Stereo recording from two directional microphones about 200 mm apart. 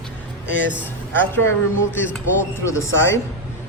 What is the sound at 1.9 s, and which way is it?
Speech, 10° left (ahead or behind).